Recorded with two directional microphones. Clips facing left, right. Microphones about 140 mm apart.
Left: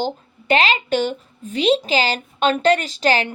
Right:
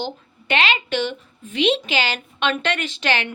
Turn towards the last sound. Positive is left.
turn(degrees=35)  # may be behind; listen again after turning